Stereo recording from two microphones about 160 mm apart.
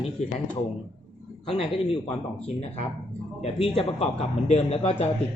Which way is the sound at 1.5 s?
35° left (ahead or behind).